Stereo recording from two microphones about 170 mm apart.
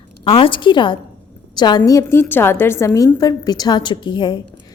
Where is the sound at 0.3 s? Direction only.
30° left (ahead or behind).